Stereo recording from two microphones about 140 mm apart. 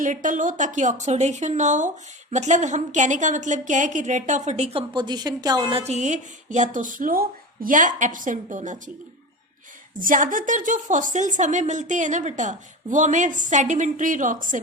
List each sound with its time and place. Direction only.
0.0 s a woman's voice: 65° right (ahead or behind); by 5.8 s 30° right (ahead or behind)
5.8 s a woman's voice: 55° right (ahead or behind)
9.9 s a woman's voice: 70° right (ahead or behind)